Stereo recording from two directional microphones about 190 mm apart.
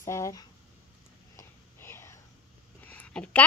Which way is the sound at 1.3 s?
15° left (ahead or behind).